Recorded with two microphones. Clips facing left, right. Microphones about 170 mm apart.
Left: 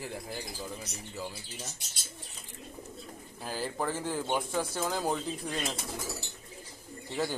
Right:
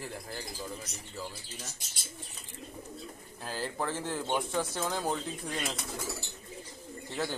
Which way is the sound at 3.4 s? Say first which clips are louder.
Left 1 dB; 5° left (ahead or behind).